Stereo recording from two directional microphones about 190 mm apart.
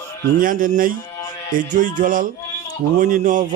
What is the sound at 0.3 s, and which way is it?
A man's voice, 45° right (ahead or behind).